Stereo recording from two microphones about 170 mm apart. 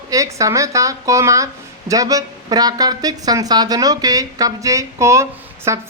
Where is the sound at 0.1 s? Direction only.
20° right (ahead or behind).